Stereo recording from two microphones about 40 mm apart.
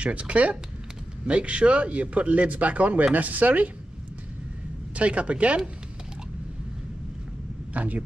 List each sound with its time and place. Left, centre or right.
0.0 s speech: right
4.9 s speech: right
7.7 s speech: right